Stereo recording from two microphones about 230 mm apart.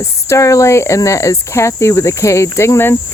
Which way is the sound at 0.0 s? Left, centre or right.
Centre.